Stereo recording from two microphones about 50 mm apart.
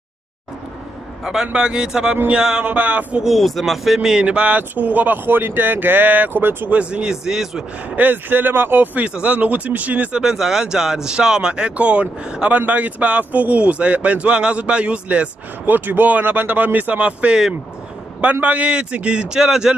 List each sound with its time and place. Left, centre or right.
1.2 s speech: centre
2.6 s speech: right
3.3 s speech: centre; by 6.7 s right
6.7 s speech: right
7.9 s speech: right
9.0 s speech: right
10.2 s speech: centre
15.6 s speech: right
18.4 s speech: right